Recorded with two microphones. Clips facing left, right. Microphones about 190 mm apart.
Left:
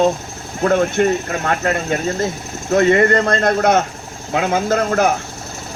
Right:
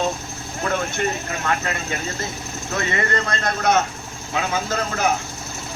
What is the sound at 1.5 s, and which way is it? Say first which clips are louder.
Speech: left 7 dB; 45° left (ahead or behind).